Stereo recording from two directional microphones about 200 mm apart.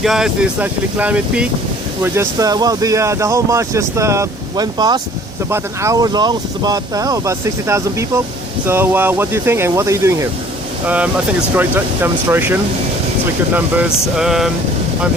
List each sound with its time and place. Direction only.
0.0 s speech: centre (ahead or behind)